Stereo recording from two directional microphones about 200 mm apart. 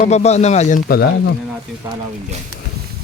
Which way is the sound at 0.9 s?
55° left (ahead or behind).